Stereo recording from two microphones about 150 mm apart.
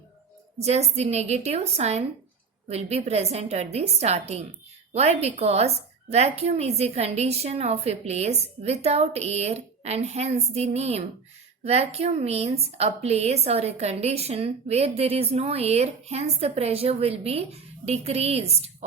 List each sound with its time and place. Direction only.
0.6 s a woman's voice: 45° right (ahead or behind)